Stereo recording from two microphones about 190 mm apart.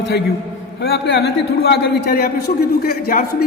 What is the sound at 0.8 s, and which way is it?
A man's voice, 60° left (ahead or behind).